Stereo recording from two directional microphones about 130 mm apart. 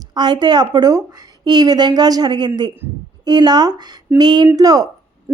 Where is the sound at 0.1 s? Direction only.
35° right (ahead or behind).